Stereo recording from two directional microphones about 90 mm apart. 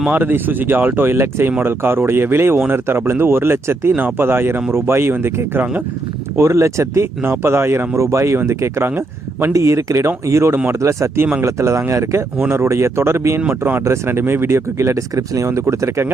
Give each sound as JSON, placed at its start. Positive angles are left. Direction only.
{"t": 0.0, "sound": "speech", "side_deg": -20}
{"t": 9.5, "sound": "speech", "side_deg": -35}